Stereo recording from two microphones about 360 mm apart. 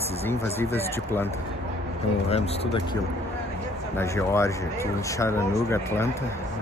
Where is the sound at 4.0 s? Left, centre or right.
Centre.